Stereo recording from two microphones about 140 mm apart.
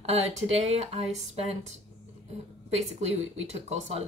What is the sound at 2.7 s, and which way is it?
Speech, 50° right (ahead or behind).